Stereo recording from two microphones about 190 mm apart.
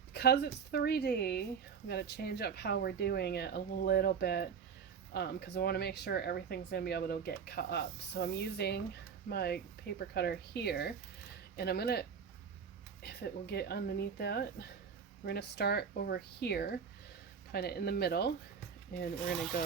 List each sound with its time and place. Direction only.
0.1 s speech: 60° left (ahead or behind)